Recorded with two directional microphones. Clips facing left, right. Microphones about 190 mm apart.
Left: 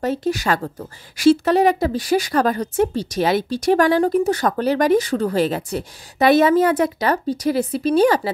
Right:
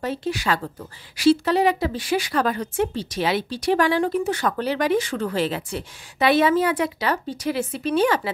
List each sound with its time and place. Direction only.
0.0 s speech: 45° left (ahead or behind)